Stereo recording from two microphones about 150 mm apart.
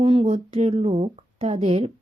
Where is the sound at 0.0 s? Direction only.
40° right (ahead or behind).